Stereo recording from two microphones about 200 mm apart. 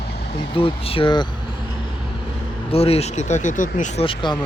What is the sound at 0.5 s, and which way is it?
Speech, 25° left (ahead or behind).